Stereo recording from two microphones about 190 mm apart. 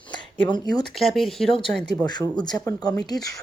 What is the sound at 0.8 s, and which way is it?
Speech, centre (ahead or behind).